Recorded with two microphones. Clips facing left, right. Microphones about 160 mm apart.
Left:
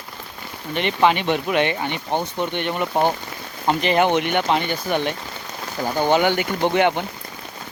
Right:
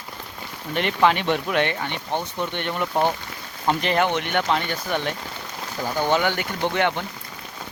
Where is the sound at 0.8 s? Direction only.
Centre (ahead or behind).